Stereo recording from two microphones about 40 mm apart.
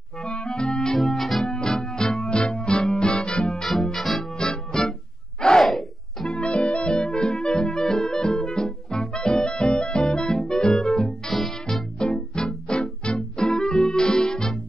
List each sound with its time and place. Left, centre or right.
0.2 s music: left
0.9 s organ: centre
1.4 s music: centre
2.2 s music: left
3.8 s music: centre
4.4 s music: centre
5.6 s a sound: centre
6.3 s music: left
11.1 s music: centre
12.0 s music: left